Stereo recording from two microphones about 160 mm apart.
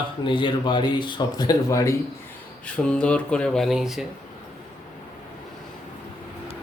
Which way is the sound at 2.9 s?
5° left (ahead or behind).